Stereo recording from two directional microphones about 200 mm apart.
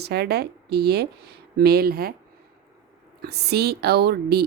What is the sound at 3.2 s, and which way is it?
A woman's voice, 55° right (ahead or behind).